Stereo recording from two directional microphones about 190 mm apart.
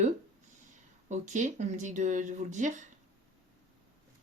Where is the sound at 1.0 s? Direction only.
40° right (ahead or behind).